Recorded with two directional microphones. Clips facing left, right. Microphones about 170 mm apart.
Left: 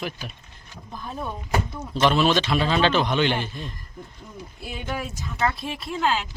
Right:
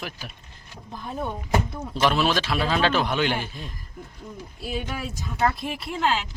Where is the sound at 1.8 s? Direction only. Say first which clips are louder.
Left 4 dB; 10° right (ahead or behind).